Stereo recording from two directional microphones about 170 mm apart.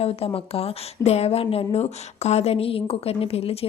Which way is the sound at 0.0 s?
35° left (ahead or behind).